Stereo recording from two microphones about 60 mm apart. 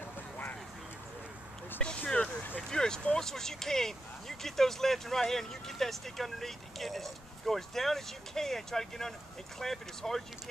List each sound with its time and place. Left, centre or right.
1.8 s a sound: centre
2.7 s vehicle: centre
3.2 s speech: centre